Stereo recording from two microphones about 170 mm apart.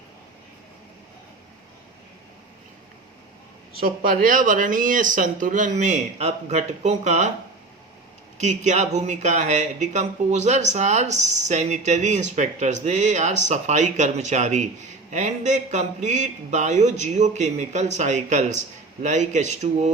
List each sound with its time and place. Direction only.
3.8 s speech: 60° right (ahead or behind); by 7.3 s 40° right (ahead or behind)
8.4 s speech: 45° right (ahead or behind)